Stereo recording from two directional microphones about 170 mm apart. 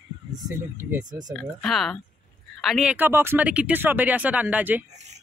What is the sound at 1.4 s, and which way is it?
Speech, centre (ahead or behind).